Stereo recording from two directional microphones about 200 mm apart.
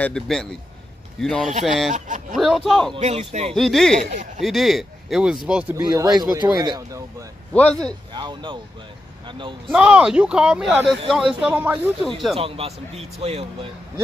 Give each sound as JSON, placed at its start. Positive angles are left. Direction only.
{"t": 0.0, "sound": "speech", "side_deg": 5}
{"t": 1.9, "sound": "speech", "side_deg": -35}
{"t": 2.3, "sound": "speech", "side_deg": 0}
{"t": 3.0, "sound": "speech", "side_deg": -35}
{"t": 3.5, "sound": "speech", "side_deg": 0}
{"t": 5.8, "sound": "speech", "side_deg": -20}
{"t": 7.5, "sound": "speech", "side_deg": 5}
{"t": 8.1, "sound": "speech", "side_deg": -20}
{"t": 9.7, "sound": "speech", "side_deg": -5}
{"t": 12.4, "sound": "speech", "side_deg": -30}